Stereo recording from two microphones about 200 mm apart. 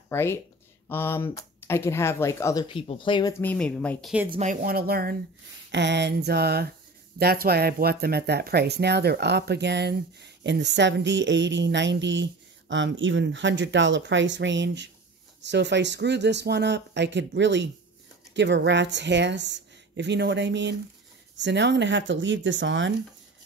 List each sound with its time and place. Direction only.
0.1 s speech: 10° left (ahead or behind)
2.7 s speech: 25° left (ahead or behind)
3.4 s speech: 5° left (ahead or behind)
4.3 s a sound: 35° right (ahead or behind)
5.7 s a sound: 60° right (ahead or behind)
7.2 s speech: 50° right (ahead or behind); by 22.9 s 65° right (ahead or behind)